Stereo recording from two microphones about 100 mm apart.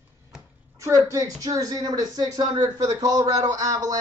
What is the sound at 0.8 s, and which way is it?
Speech, 30° right (ahead or behind).